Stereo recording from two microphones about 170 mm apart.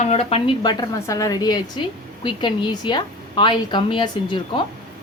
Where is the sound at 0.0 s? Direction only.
40° left (ahead or behind).